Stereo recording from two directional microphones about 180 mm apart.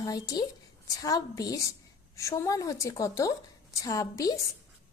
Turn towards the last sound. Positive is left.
turn(degrees=20)  # may be behind; listen again after turning